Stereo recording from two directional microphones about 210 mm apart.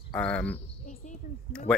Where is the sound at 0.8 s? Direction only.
35° left (ahead or behind).